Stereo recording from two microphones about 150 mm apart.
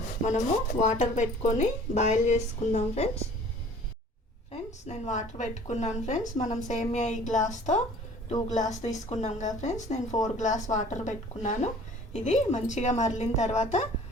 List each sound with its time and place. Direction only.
0.3 s speech: 55° left (ahead or behind)
4.5 s a woman's voice: 50° left (ahead or behind)